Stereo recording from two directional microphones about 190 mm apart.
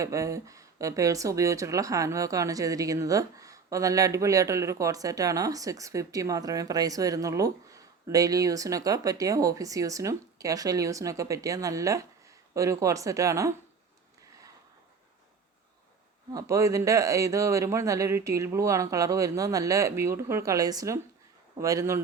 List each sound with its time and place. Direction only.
0.0 s speech: 15° right (ahead or behind)
16.3 s speech: 15° right (ahead or behind)